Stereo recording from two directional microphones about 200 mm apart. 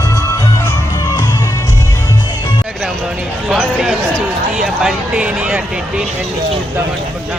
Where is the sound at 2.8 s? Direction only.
5° right (ahead or behind).